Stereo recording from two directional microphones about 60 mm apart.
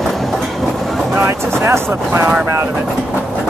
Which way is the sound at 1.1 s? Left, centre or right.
Right.